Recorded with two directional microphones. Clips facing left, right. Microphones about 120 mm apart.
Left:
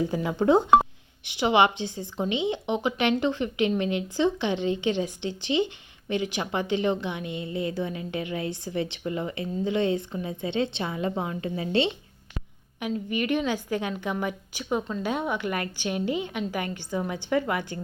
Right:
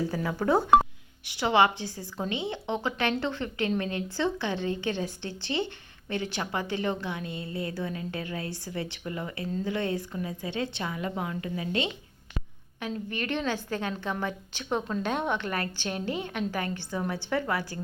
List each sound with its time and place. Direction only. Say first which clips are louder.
0.0 s speech: left 4 dB; 20° left (ahead or behind)
12.8 s a woman's voice: left 5 dB; 15° left (ahead or behind)